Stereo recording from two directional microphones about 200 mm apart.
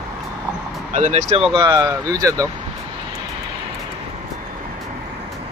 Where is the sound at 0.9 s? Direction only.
35° right (ahead or behind).